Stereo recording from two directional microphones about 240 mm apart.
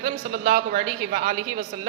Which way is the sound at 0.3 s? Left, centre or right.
Right.